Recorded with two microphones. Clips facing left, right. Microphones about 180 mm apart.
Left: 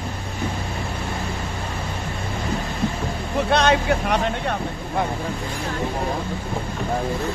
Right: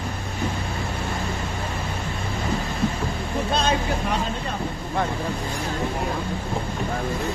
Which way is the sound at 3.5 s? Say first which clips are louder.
Left 6 dB; 70° left (ahead or behind).